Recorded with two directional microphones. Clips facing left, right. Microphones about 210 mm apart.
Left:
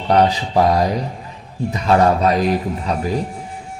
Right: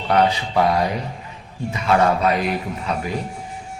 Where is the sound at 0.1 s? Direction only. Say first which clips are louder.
Left 3 dB; 35° left (ahead or behind).